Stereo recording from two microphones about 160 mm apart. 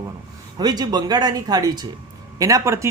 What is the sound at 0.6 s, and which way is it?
Speech, 25° right (ahead or behind).